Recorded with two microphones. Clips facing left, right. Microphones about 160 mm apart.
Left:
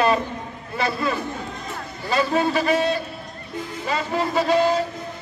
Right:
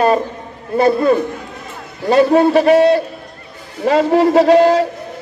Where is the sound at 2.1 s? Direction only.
65° right (ahead or behind).